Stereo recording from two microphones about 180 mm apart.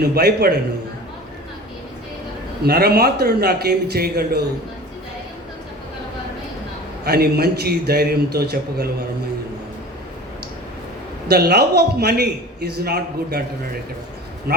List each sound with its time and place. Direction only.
0.0 s a man's voice: 60° right (ahead or behind)
2.6 s a man's voice: 60° right (ahead or behind)
7.0 s a man's voice: 60° right (ahead or behind)
11.3 s a man's voice: 60° right (ahead or behind)